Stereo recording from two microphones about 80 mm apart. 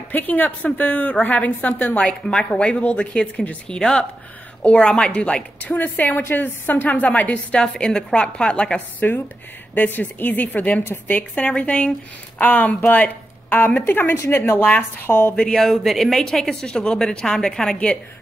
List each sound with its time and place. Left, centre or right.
0.1 s a woman's voice: left
9.8 s a woman's voice: left
14.6 s speech: left
15.4 s a woman's voice: centre